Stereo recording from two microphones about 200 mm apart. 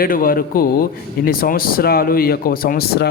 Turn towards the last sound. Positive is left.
turn(degrees=50)  # may be behind; listen again after turning